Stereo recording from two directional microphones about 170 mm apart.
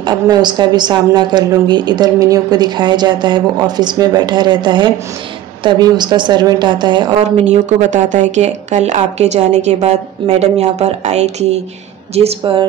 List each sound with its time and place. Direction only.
0.0 s a woman's voice: 25° right (ahead or behind)
7.4 s speech: 45° right (ahead or behind)